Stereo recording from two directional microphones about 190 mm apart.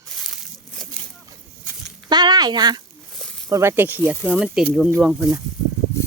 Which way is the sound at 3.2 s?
Centre (ahead or behind).